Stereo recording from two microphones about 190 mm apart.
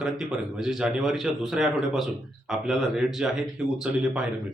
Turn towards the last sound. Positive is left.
turn(degrees=-5)  # may be behind; listen again after turning